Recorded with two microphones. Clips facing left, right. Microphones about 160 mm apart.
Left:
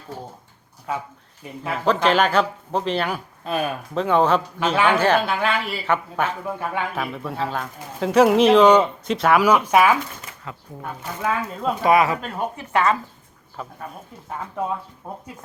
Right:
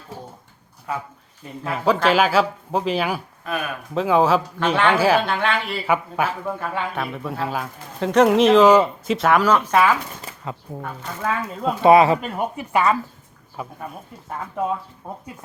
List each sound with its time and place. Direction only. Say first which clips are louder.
1.6 s speech: right 1 dB; 5° right (ahead or behind)
3.4 s speech: left 4 dB; 30° left (ahead or behind)
3.9 s speech: right 1 dB; 5° right (ahead or behind)
4.6 s speech: even; 5° left (ahead or behind)
4.9 s speech: right 1 dB; 5° right (ahead or behind)
6.6 s speech: even; 10° left (ahead or behind)
7.0 s speech: even; centre (ahead or behind)
9.4 s speech: left 1 dB; 10° left (ahead or behind)
10.2 s a sound: right 4 dB; 30° right (ahead or behind)
11.0 s speech: left 1 dB; 10° left (ahead or behind)
11.8 s speech: right 5 dB; 25° right (ahead or behind)
12.2 s speech: right 2 dB; 10° right (ahead or behind)